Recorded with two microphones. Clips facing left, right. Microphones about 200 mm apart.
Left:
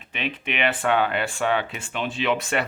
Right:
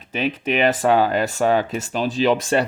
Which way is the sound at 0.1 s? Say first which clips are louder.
Right 8 dB; 40° right (ahead or behind).